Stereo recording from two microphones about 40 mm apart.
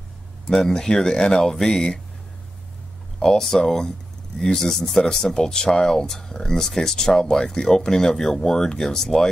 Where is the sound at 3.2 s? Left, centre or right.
Centre.